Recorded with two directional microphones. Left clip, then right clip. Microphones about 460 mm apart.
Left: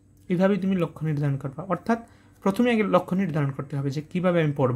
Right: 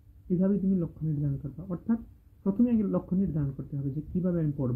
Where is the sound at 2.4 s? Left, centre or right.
Centre.